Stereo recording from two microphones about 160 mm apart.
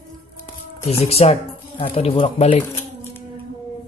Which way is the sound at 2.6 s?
15° left (ahead or behind).